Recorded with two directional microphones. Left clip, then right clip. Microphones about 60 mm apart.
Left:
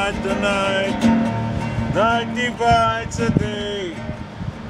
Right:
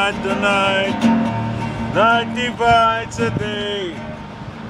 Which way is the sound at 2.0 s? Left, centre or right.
Centre.